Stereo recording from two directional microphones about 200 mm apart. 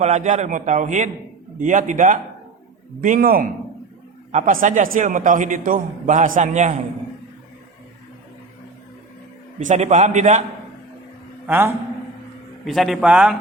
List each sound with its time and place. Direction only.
0.0 s a man's voice: 35° right (ahead or behind)
4.3 s a man's voice: 35° right (ahead or behind)
9.6 s a man's voice: 35° right (ahead or behind)
11.4 s a man's voice: 10° right (ahead or behind)